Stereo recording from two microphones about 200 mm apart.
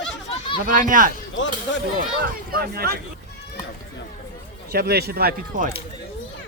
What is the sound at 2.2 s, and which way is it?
Speech, 45° right (ahead or behind).